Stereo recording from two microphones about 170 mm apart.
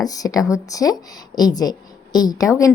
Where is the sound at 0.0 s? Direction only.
20° left (ahead or behind).